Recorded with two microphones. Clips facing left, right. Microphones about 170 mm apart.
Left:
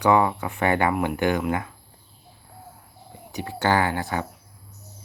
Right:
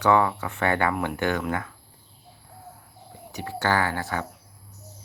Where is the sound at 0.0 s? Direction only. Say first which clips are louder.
Left 1 dB; 15° left (ahead or behind).